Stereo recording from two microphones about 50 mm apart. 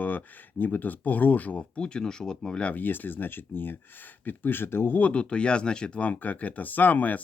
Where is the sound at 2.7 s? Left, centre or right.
Left.